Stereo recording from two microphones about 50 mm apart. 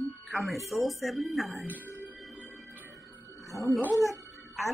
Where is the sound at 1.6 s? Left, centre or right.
Right.